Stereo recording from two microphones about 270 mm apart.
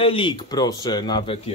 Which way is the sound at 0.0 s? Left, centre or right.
Centre.